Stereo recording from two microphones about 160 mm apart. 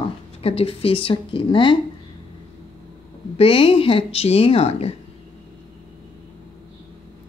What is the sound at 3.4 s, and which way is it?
A woman's voice, 35° left (ahead or behind).